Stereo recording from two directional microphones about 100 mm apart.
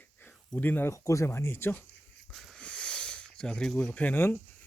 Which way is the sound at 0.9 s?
30° left (ahead or behind).